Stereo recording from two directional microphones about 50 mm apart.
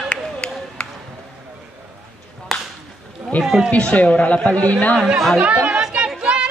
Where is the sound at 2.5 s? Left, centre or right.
Centre.